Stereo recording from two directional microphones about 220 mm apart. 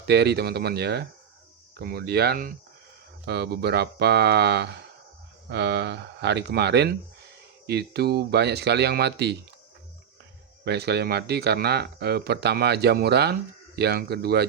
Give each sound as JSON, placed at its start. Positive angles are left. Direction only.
{"t": 0.1, "sound": "speech", "side_deg": -50}
{"t": 10.7, "sound": "speech", "side_deg": -50}